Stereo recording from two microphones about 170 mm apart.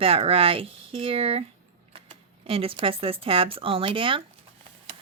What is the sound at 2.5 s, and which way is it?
Speech, 35° right (ahead or behind).